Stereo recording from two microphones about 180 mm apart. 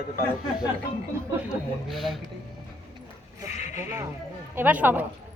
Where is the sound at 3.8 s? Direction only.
15° right (ahead or behind).